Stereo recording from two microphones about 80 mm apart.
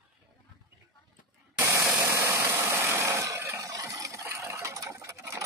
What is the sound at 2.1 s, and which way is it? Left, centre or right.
Vehicle, right.